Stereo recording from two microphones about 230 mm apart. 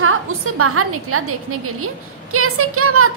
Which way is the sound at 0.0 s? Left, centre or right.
Right.